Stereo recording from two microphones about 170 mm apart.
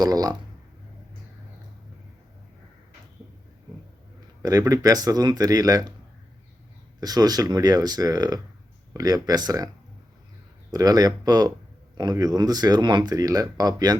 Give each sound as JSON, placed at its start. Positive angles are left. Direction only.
{"t": 0.0, "sound": "speech", "side_deg": -20}
{"t": 4.4, "sound": "speech", "side_deg": -20}
{"t": 7.0, "sound": "speech", "side_deg": -20}
{"t": 10.7, "sound": "speech", "side_deg": -20}